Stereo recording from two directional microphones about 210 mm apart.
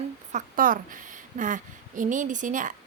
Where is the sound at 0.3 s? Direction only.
40° right (ahead or behind).